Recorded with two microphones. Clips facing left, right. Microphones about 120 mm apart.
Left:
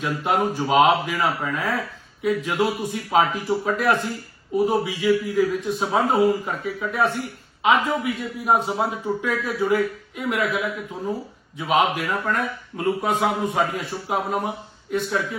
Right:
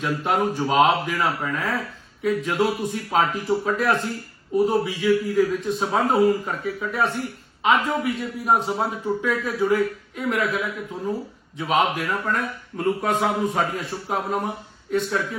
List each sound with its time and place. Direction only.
0.0 s a man's voice: centre (ahead or behind)